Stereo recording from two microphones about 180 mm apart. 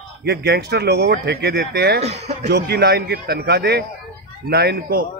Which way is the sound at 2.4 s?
65° right (ahead or behind).